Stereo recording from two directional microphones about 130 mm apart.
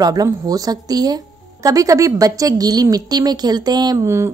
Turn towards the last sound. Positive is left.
turn(degrees=-20)  # may be behind; listen again after turning